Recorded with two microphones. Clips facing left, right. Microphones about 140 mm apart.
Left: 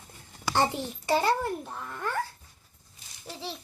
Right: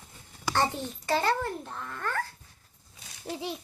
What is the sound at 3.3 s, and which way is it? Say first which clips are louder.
Babbling: right 4 dB; 15° right (ahead or behind).